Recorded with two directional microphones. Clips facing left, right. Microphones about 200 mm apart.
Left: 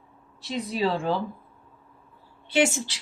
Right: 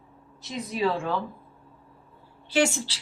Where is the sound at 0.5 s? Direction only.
30° left (ahead or behind).